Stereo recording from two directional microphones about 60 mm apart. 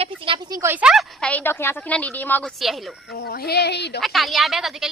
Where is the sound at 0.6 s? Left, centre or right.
Right.